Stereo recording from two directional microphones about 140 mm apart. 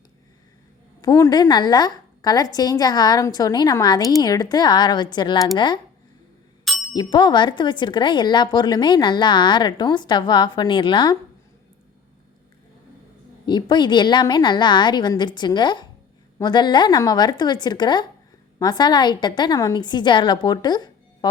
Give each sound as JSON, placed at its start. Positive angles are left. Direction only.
{"t": 1.0, "sound": "a woman's voice", "side_deg": 25}
{"t": 6.7, "sound": "music", "side_deg": 0}
{"t": 6.9, "sound": "speech", "side_deg": 30}
{"t": 13.4, "sound": "speech", "side_deg": 30}